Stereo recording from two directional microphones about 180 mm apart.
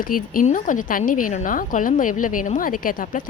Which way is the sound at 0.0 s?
50° left (ahead or behind).